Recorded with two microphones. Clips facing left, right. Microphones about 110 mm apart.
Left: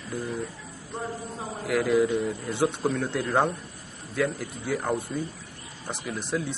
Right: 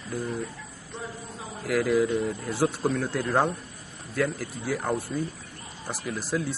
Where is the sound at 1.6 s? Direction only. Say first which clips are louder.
Even; centre (ahead or behind).